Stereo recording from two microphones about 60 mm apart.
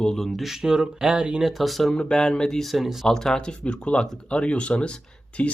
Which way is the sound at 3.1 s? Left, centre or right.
Centre.